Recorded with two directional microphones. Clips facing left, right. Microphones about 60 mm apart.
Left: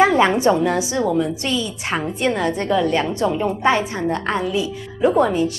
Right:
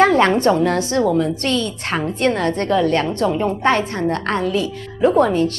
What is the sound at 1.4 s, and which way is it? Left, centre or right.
Speech, right.